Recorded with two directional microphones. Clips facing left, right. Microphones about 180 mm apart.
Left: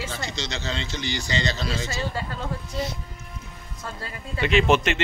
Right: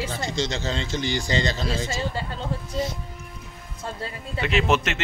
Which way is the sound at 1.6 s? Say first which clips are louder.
Right 2 dB; 25° right (ahead or behind).